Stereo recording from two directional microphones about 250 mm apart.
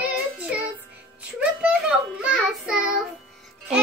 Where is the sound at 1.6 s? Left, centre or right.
Centre.